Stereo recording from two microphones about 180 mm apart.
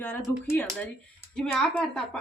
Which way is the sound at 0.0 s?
10° left (ahead or behind).